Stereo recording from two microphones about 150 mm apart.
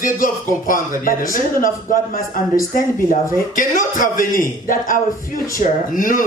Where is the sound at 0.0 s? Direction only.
65° left (ahead or behind).